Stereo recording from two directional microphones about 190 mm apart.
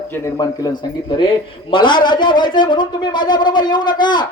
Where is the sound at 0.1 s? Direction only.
15° left (ahead or behind).